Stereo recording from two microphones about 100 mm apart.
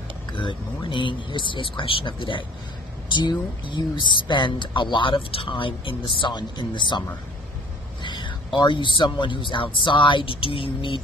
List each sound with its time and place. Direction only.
0.3 s speech: 55° left (ahead or behind)
8.0 s vehicle: 50° left (ahead or behind)
8.5 s speech: 55° left (ahead or behind)